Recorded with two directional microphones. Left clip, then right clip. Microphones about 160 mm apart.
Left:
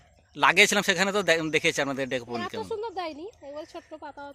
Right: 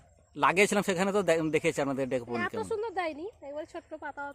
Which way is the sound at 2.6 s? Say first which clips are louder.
Even; 15° left (ahead or behind).